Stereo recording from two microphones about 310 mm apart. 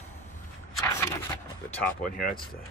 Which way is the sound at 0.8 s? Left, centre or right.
Centre.